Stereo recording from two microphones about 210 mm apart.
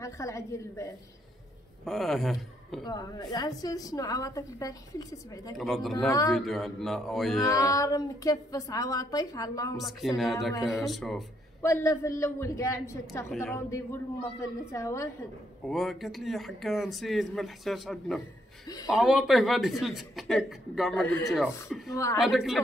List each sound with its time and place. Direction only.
0.0 s a woman's voice: 15° left (ahead or behind)
1.9 s a man's voice: centre (ahead or behind)
2.8 s a woman's voice: 20° left (ahead or behind)
5.6 s speech: centre (ahead or behind)
5.9 s a woman's voice: 15° left (ahead or behind)
6.3 s speech: centre (ahead or behind)
7.4 s a woman's voice: 15° left (ahead or behind)
9.8 s speech: centre (ahead or behind)
10.5 s a woman's voice: 15° left (ahead or behind)
10.9 s speech: centre (ahead or behind)
11.6 s a woman's voice: 15° left (ahead or behind)
15.6 s speech: centre (ahead or behind)
21.9 s a woman's voice: 15° left (ahead or behind)
22.2 s speech: centre (ahead or behind)